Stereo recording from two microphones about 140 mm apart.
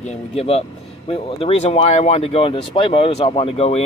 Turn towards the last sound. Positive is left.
turn(degrees=45)  # may be behind; listen again after turning